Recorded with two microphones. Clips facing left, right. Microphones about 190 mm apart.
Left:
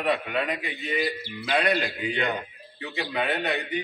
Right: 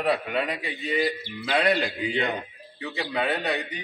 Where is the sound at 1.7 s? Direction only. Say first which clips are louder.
Right 1 dB; 15° right (ahead or behind).